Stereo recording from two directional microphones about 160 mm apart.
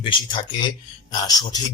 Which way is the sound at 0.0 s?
30° left (ahead or behind).